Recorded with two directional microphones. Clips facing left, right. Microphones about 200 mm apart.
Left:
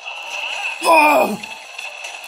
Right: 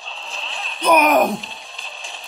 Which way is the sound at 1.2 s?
Centre (ahead or behind).